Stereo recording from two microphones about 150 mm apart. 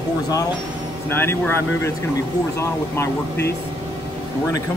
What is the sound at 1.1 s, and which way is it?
Speech, 15° left (ahead or behind).